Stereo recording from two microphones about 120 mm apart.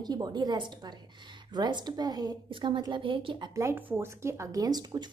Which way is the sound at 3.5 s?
20° right (ahead or behind).